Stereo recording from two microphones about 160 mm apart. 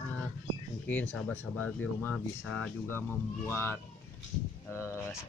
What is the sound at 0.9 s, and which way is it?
Speech, 10° left (ahead or behind).